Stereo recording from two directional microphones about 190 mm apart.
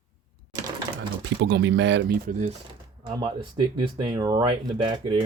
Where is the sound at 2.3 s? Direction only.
45° right (ahead or behind).